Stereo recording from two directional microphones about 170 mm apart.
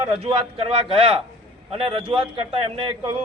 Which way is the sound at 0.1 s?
30° right (ahead or behind).